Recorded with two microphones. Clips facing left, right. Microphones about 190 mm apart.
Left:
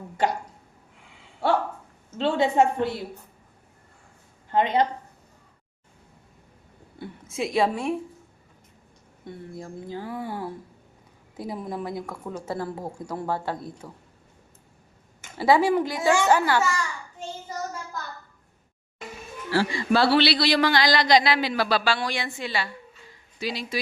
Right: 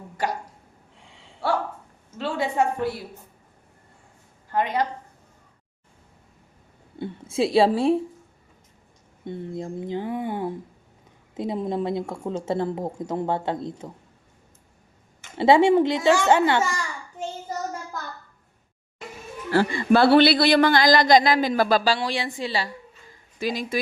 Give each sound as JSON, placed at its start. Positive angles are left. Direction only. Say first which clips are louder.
{"t": 2.1, "sound": "a woman's voice", "louder": "left 3 dB", "side_deg": 25}
{"t": 4.5, "sound": "a woman's voice", "louder": "left 2 dB", "side_deg": 25}
{"t": 7.0, "sound": "a woman's voice", "louder": "right 6 dB", "side_deg": -30}
{"t": 9.2, "sound": "speech", "louder": "right 6 dB", "side_deg": -20}
{"t": 15.4, "sound": "speech", "louder": "right 4 dB", "side_deg": -25}
{"t": 19.5, "sound": "speech", "louder": "right 4 dB", "side_deg": -50}
{"t": 22.0, "sound": "a woman's voice", "louder": "right 3 dB", "side_deg": -30}
{"t": 23.4, "sound": "speech", "louder": "right 4 dB", "side_deg": -50}